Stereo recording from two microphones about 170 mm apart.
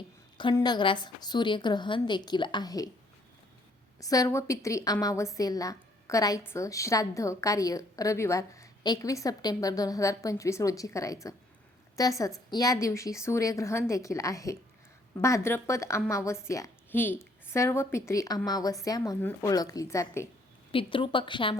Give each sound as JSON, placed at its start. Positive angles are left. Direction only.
{"t": 0.5, "sound": "a woman's voice", "side_deg": 25}
{"t": 4.0, "sound": "a woman's voice", "side_deg": 20}
{"t": 20.7, "sound": "a woman's voice", "side_deg": 30}